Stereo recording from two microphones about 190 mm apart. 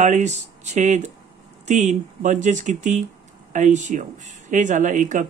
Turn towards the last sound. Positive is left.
turn(degrees=-40)  # may be behind; listen again after turning